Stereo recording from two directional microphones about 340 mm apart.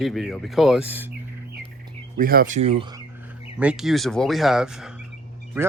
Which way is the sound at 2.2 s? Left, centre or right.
Right.